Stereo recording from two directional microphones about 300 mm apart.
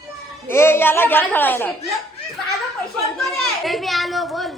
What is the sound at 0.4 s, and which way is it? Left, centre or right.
A woman's voice, centre.